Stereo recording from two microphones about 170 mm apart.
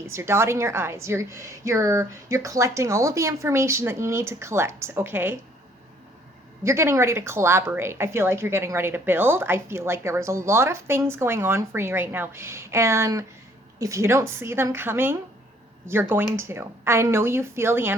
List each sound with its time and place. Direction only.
0.1 s speech: 15° right (ahead or behind)
6.7 s speech: 15° right (ahead or behind)